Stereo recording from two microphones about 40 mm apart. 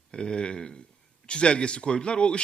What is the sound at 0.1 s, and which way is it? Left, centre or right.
A man's voice, left.